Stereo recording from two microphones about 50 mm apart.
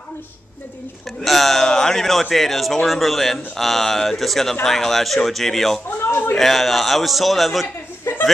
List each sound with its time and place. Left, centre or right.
1.2 s a man's voice: centre
5.9 s a man's voice: left
6.3 s a man's voice: centre